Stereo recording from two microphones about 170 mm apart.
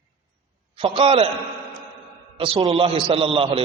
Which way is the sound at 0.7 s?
30° right (ahead or behind).